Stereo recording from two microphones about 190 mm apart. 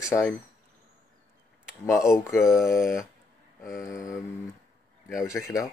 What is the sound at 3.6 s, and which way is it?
Speech, 15° left (ahead or behind).